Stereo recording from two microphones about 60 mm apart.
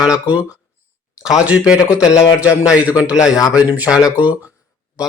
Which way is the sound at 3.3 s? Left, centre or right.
Left.